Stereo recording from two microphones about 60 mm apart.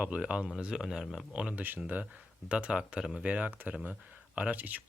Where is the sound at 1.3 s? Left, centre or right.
Centre.